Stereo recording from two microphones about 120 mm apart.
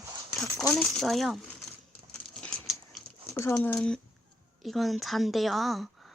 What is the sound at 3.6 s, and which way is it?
Speech, 5° left (ahead or behind).